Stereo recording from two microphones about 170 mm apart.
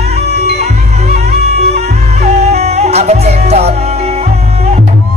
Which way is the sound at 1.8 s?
40° right (ahead or behind).